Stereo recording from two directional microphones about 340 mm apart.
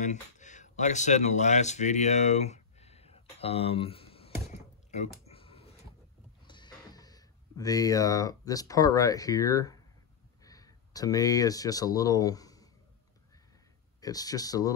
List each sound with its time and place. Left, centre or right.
0.0 s a sound: left
6.4 s speech: centre
14.0 s speech: centre